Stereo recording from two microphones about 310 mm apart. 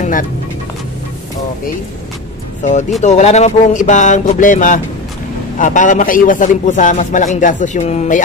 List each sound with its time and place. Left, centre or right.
3.0 s speech: left